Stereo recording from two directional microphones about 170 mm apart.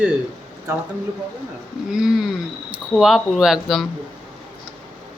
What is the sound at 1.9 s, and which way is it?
A woman's voice, 5° right (ahead or behind).